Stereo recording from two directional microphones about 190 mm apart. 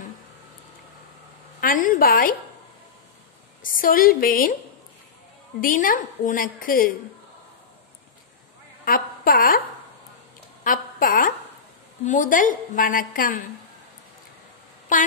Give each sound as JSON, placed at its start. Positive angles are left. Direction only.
{"t": 1.6, "sound": "a woman's voice", "side_deg": 45}
{"t": 3.6, "sound": "a woman's voice", "side_deg": 45}
{"t": 5.6, "sound": "a woman's voice", "side_deg": 45}
{"t": 8.8, "sound": "a woman's voice", "side_deg": 50}
{"t": 10.6, "sound": "a woman's voice", "side_deg": 45}
{"t": 14.9, "sound": "a woman's voice", "side_deg": 40}